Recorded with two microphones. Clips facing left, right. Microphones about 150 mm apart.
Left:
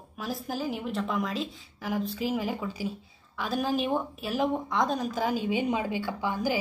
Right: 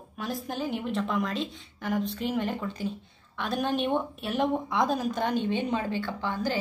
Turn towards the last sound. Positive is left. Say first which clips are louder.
# left 1 dB
turn(degrees=10)  # may be behind; listen again after turning